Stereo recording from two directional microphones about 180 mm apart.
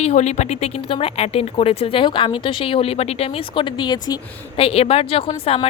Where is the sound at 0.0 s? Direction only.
40° left (ahead or behind).